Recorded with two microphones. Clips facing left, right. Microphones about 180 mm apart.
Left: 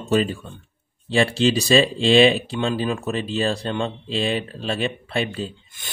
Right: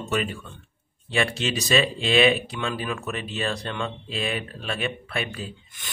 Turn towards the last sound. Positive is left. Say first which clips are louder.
# left 5 dB
turn(degrees=30)  # may be behind; listen again after turning